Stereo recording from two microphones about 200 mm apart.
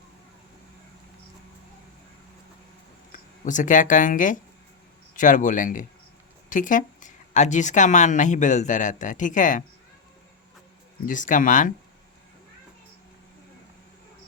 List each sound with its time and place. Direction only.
3.1 s speech: 40° left (ahead or behind)
11.0 s speech: 40° left (ahead or behind)